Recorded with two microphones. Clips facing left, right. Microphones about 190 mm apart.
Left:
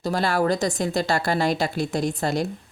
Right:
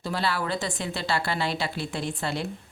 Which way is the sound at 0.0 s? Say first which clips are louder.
Left 6 dB; 45° left (ahead or behind).